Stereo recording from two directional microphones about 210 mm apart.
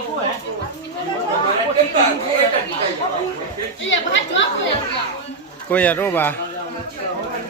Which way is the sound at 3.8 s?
60° left (ahead or behind).